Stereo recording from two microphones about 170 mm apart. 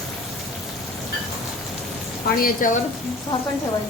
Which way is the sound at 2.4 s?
50° left (ahead or behind).